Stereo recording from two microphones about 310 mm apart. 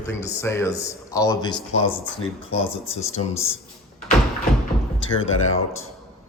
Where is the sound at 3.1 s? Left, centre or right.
Centre.